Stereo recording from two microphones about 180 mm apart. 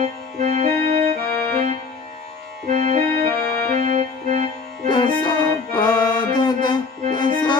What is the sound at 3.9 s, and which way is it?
Organ, 35° right (ahead or behind).